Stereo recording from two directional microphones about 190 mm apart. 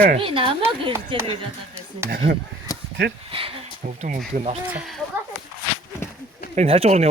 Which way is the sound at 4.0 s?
40° right (ahead or behind).